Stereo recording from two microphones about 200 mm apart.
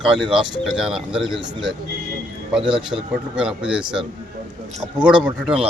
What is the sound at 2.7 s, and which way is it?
Speech, 5° right (ahead or behind).